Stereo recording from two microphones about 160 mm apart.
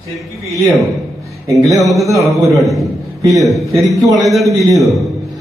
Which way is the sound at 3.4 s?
Centre (ahead or behind).